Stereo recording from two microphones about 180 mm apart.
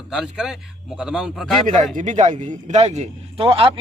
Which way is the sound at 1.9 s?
45° right (ahead or behind).